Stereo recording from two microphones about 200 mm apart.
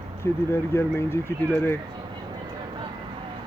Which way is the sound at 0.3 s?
10° left (ahead or behind).